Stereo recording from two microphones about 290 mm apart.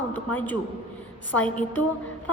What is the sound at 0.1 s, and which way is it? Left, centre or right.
A man's voice, centre.